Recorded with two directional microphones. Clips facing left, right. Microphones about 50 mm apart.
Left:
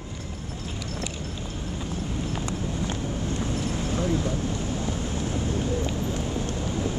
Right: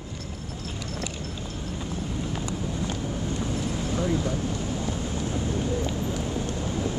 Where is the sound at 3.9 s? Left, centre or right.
Centre.